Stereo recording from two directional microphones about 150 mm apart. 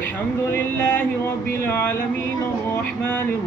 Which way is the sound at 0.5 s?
15° left (ahead or behind).